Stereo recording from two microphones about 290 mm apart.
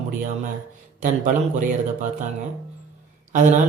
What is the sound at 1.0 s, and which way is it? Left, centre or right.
Speech, right.